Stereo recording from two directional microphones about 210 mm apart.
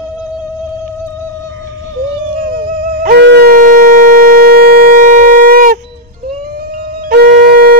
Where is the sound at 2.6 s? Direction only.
45° right (ahead or behind).